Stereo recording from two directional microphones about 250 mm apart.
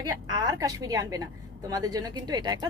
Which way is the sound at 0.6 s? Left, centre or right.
Centre.